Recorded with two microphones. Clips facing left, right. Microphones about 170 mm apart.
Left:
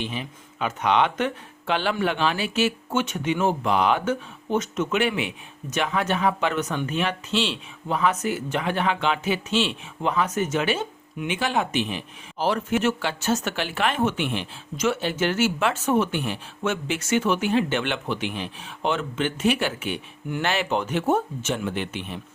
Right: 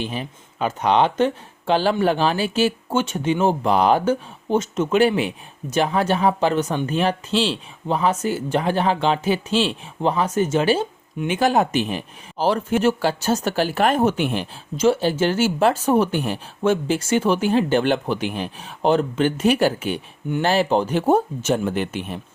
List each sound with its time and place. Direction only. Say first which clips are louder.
0.0 s speech: right 3 dB; 40° right (ahead or behind)